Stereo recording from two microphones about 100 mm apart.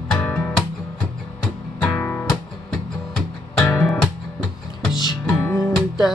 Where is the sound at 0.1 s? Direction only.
10° left (ahead or behind).